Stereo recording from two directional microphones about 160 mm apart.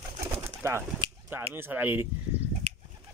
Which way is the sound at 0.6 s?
15° right (ahead or behind).